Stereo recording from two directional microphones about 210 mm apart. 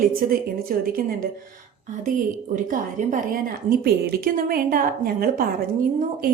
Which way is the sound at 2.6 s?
40° right (ahead or behind).